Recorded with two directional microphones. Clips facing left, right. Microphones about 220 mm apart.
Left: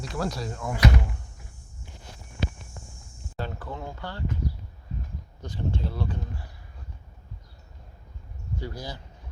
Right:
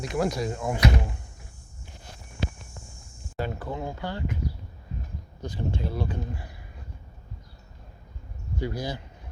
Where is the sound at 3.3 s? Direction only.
15° right (ahead or behind).